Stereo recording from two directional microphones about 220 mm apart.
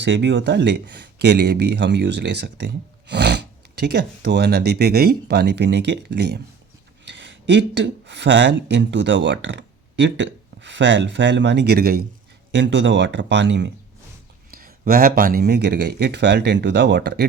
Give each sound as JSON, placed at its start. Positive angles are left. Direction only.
{"t": 0.0, "sound": "speech", "side_deg": -55}
{"t": 14.5, "sound": "speech", "side_deg": -40}